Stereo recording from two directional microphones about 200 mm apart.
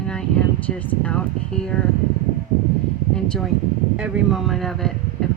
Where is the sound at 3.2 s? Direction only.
Centre (ahead or behind).